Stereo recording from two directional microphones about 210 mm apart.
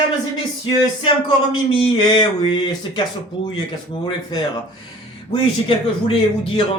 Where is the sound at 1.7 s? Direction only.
25° left (ahead or behind).